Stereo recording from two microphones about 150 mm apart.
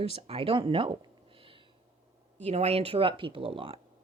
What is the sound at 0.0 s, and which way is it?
A woman's voice, 40° right (ahead or behind).